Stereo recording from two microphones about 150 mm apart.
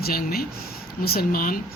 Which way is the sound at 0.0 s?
85° left.